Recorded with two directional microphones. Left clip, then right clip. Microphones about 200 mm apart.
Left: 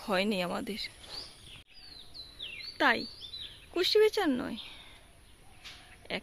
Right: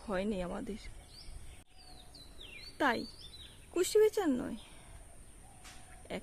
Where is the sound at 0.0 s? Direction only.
15° left (ahead or behind).